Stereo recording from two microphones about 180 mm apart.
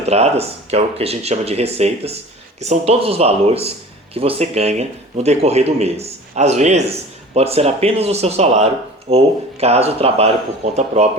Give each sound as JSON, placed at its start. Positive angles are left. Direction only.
{"t": 0.0, "sound": "speech", "side_deg": -35}